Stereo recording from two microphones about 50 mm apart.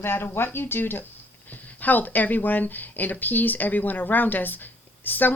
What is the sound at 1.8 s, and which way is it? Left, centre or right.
Speech, left.